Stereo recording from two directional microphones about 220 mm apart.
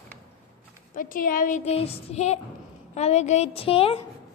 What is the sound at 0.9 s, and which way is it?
A woman's voice, 40° left (ahead or behind).